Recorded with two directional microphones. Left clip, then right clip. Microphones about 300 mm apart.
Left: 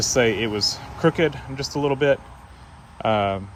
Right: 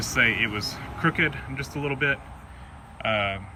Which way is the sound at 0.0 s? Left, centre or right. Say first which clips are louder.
Left 2 dB; centre.